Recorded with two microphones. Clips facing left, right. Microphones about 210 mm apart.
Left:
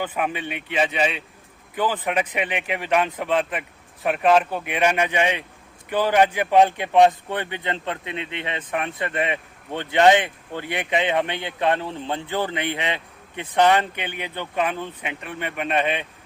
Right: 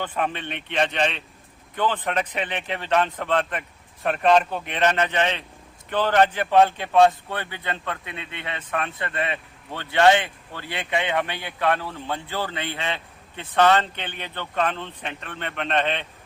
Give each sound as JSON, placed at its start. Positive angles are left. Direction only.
{"t": 0.0, "sound": "a man's voice", "side_deg": 10}